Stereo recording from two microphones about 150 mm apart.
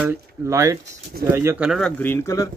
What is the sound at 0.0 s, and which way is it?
Speech, 15° right (ahead or behind).